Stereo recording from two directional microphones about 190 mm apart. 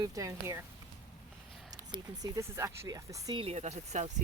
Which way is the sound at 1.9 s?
20° right (ahead or behind).